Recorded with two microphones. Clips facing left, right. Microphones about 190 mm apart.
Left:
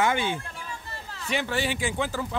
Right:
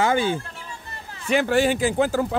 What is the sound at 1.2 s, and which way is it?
Speech, 50° right (ahead or behind).